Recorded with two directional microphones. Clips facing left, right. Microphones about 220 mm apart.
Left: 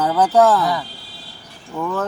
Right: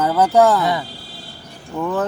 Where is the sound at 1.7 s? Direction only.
15° right (ahead or behind).